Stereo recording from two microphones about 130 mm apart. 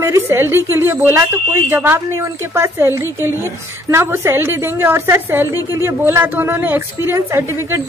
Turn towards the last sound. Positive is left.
turn(degrees=-20)  # may be behind; listen again after turning